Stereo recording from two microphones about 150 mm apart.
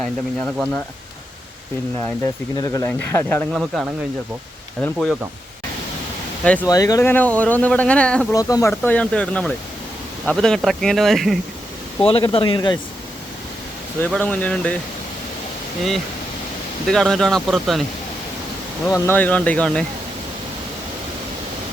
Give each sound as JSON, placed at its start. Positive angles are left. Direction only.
{"t": 0.0, "sound": "speech", "side_deg": 5}
{"t": 2.2, "sound": "speech", "side_deg": 25}
{"t": 3.5, "sound": "speech", "side_deg": 0}
{"t": 6.7, "sound": "speech", "side_deg": 25}
{"t": 8.3, "sound": "speech", "side_deg": 25}
{"t": 12.0, "sound": "speech", "side_deg": 35}
{"t": 14.1, "sound": "speech", "side_deg": 10}
{"t": 16.9, "sound": "speech", "side_deg": 5}
{"t": 18.9, "sound": "speech", "side_deg": 20}